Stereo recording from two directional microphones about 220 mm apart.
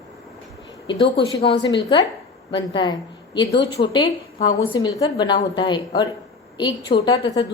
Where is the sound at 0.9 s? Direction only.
20° left (ahead or behind).